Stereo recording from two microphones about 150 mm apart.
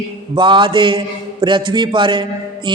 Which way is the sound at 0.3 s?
30° right (ahead or behind).